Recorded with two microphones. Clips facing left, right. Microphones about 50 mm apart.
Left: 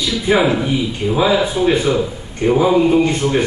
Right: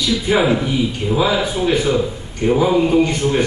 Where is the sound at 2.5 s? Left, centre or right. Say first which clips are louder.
Left 2 dB; centre.